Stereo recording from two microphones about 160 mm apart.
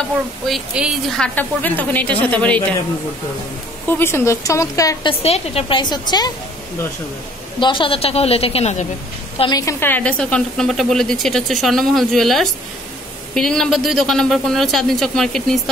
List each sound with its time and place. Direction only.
0.5 s a woman's voice: centre (ahead or behind)
4.0 s a woman's voice: 15° left (ahead or behind)
5.2 s a woman's voice: 40° left (ahead or behind)
7.6 s a woman's voice: 30° left (ahead or behind)
9.4 s a woman's voice: 25° left (ahead or behind); by 15.7 s centre (ahead or behind)